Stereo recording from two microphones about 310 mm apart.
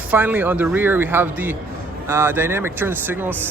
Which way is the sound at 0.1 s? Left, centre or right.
Centre.